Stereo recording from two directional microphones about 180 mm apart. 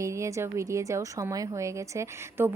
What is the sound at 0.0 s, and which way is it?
A woman's voice, 15° right (ahead or behind).